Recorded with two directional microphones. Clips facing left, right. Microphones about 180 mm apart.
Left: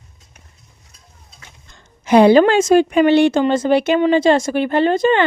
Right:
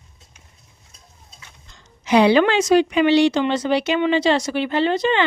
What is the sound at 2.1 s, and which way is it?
Speech, 50° left (ahead or behind).